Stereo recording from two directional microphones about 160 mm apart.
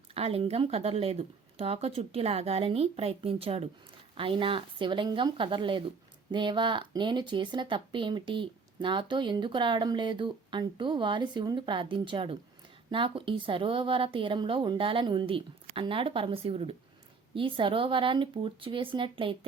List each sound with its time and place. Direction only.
0.1 s a woman's voice: 35° right (ahead or behind)